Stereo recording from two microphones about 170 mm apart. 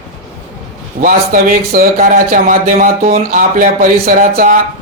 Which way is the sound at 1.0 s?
55° right (ahead or behind).